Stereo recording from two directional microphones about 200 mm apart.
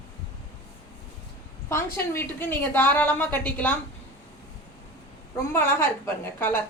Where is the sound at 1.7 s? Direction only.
10° left (ahead or behind).